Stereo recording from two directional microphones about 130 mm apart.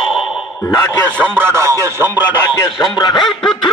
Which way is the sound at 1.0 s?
10° left (ahead or behind).